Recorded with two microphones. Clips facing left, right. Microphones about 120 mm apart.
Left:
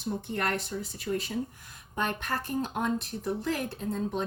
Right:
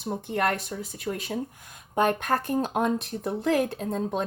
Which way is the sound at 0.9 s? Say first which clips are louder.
Right 1 dB; 60° right (ahead or behind).